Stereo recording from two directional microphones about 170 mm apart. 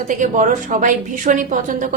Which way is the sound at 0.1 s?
50° right (ahead or behind).